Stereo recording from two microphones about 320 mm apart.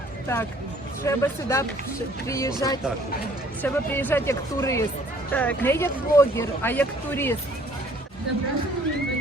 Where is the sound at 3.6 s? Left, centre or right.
Centre.